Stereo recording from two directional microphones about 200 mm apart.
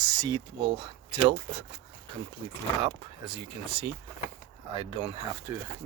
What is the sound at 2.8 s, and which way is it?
Speech, 25° right (ahead or behind).